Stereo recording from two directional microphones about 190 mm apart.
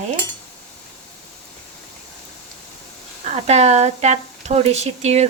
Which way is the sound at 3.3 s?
35° right (ahead or behind).